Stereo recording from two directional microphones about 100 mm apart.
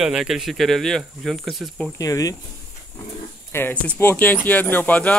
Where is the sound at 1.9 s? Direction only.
35° left (ahead or behind).